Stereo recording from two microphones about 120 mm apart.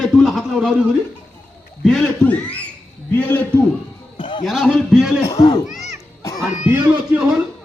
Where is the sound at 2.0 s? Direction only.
10° left (ahead or behind).